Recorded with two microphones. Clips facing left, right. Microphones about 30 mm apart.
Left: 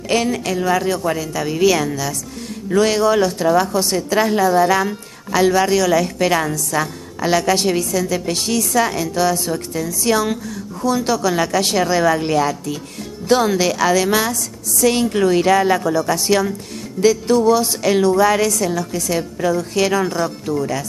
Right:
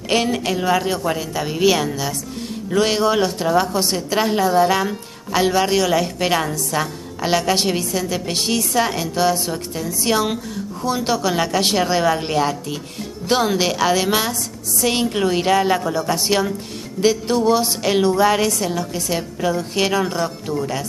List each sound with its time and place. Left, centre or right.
0.1 s speech: right
2.8 s a woman's voice: right
15.2 s a woman's voice: right
19.9 s speech: centre
20.5 s a woman's voice: right